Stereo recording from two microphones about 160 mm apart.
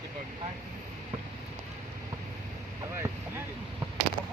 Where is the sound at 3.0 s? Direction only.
20° right (ahead or behind).